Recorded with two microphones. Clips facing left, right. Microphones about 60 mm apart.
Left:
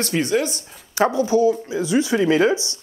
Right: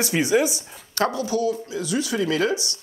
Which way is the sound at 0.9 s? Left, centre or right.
Left.